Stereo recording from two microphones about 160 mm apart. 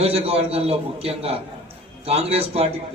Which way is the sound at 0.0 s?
40° right (ahead or behind).